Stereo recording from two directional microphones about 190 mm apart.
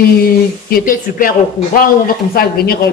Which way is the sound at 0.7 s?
45° left (ahead or behind).